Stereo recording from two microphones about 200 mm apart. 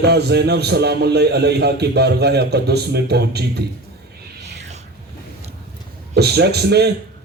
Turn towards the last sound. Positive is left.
turn(degrees=-55)  # may be behind; listen again after turning